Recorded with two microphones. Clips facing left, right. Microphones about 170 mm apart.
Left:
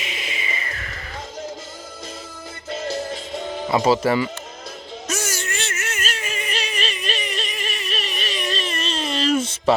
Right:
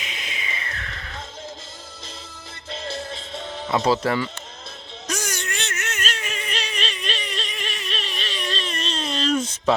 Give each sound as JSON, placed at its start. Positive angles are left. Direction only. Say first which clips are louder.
{"t": 0.0, "sound": "music", "louder": "left 4 dB", "side_deg": 0}
{"t": 2.6, "sound": "music", "louder": "left 5 dB", "side_deg": 45}
{"t": 3.3, "sound": "music", "louder": "left 3 dB", "side_deg": 10}
{"t": 5.0, "sound": "a sound", "louder": "left 1 dB", "side_deg": 5}